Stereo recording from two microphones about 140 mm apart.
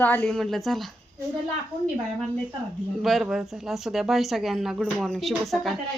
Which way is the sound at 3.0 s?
Centre (ahead or behind).